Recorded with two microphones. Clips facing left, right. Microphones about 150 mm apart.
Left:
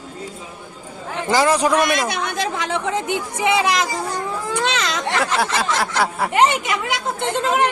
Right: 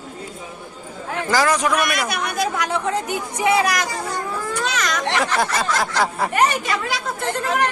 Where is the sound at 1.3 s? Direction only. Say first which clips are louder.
Left 3 dB; 25° left (ahead or behind).